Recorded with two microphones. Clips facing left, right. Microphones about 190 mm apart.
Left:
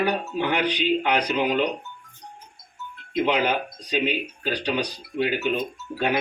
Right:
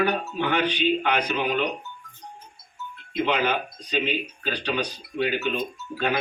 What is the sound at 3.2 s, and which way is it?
Speech, 15° left (ahead or behind).